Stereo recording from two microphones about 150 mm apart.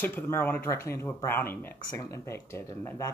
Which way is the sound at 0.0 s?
15° left (ahead or behind).